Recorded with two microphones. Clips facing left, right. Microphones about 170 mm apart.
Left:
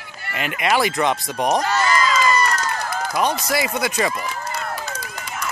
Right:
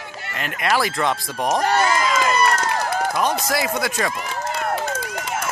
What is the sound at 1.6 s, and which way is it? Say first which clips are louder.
Crowd: right 1 dB; 60° right (ahead or behind).